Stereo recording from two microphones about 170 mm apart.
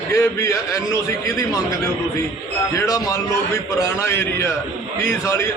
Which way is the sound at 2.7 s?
20° left (ahead or behind).